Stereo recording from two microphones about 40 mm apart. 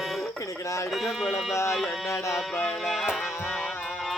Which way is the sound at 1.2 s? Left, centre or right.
Centre.